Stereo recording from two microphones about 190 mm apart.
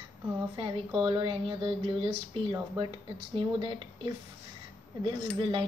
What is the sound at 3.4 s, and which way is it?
Cutlery, 25° right (ahead or behind).